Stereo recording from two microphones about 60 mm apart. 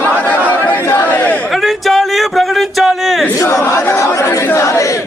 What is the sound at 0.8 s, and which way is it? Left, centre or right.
Speech, left.